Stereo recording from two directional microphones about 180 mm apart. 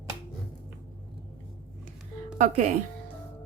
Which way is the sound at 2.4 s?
40° right (ahead or behind).